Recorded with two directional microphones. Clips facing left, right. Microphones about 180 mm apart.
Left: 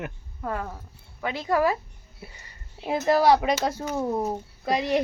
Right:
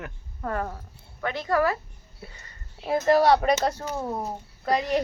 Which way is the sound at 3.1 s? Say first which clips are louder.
Even; 5° left (ahead or behind).